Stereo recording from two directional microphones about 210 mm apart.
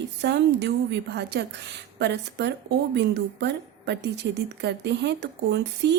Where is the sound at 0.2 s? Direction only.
55° right (ahead or behind).